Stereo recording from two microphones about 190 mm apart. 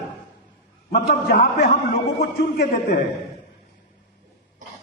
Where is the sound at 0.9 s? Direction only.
50° left (ahead or behind).